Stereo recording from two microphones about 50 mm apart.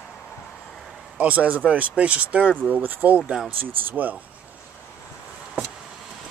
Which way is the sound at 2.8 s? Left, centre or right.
Right.